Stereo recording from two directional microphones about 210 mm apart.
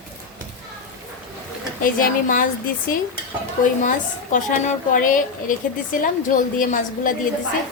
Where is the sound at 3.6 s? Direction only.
40° left (ahead or behind).